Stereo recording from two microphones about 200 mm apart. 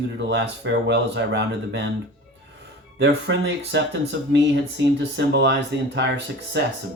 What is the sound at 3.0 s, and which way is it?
Speech, 60° right (ahead or behind).